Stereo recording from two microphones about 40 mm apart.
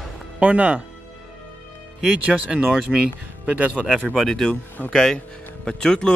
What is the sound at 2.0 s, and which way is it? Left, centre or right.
Speech, right.